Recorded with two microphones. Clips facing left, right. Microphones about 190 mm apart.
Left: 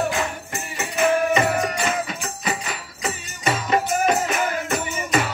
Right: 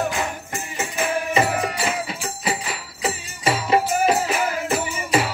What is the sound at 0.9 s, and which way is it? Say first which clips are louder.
Music: left 3 dB; 30° right (ahead or behind).